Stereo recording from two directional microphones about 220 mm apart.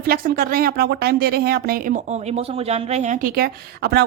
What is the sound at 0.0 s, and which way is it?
Speech, 45° right (ahead or behind).